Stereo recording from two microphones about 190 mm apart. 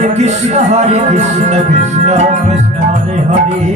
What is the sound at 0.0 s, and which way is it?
Music, 35° right (ahead or behind).